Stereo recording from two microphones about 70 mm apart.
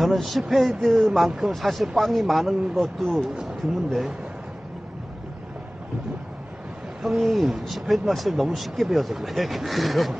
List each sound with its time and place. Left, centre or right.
0.0 s speech: centre
7.0 s speech: centre